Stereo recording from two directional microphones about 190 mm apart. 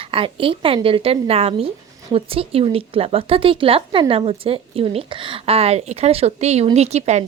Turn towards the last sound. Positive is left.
turn(degrees=-35)  # may be behind; listen again after turning